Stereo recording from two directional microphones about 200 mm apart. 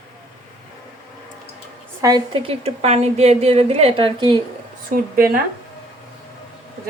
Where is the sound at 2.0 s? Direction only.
20° right (ahead or behind).